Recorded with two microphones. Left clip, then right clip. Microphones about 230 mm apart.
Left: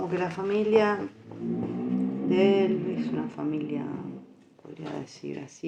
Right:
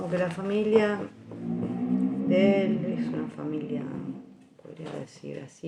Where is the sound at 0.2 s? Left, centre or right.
Left.